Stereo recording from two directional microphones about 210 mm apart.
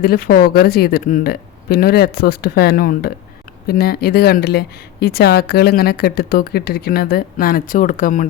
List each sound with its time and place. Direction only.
0.0 s speech: 45° left (ahead or behind)